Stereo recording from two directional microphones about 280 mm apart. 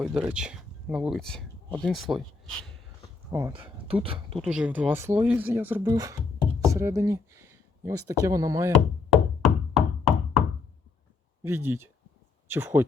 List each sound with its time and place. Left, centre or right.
0.0 s speech: centre
3.3 s speech: centre
4.5 s speech: centre
9.4 s knock: centre
11.4 s speech: centre